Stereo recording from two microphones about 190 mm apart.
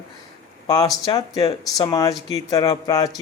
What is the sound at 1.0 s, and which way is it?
Speech, 20° left (ahead or behind).